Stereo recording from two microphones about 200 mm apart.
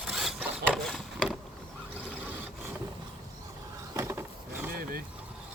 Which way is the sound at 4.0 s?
15° right (ahead or behind).